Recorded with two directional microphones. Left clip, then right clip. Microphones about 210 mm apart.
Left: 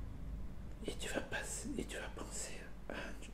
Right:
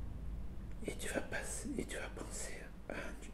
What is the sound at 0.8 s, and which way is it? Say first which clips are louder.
Whispering: right 1 dB; 5° right (ahead or behind).